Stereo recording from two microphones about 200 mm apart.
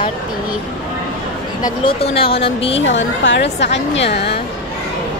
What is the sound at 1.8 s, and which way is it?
Speech, 30° left (ahead or behind).